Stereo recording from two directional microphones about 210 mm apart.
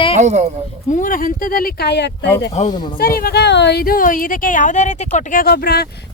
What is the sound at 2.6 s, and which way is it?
Speech, 35° left (ahead or behind).